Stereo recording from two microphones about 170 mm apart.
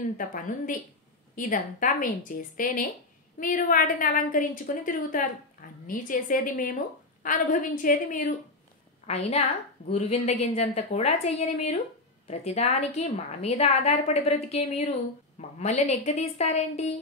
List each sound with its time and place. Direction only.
0.2 s a woman's voice: 55° left (ahead or behind)
9.0 s a woman's voice: 40° left (ahead or behind)